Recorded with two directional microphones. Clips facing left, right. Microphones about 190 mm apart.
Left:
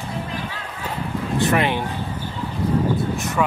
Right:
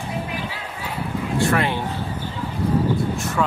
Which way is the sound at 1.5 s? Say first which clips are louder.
Left 4 dB; 15° left (ahead or behind).